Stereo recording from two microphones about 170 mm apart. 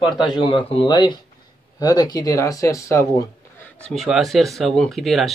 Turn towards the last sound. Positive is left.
turn(degrees=0)  # may be behind; listen again after turning